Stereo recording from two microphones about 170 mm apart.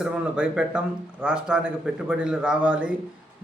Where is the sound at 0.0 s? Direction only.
5° right (ahead or behind).